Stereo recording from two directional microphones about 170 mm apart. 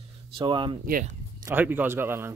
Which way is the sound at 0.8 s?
55° right (ahead or behind).